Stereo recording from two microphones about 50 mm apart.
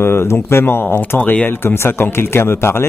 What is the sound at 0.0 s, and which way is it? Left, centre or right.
Speech, left.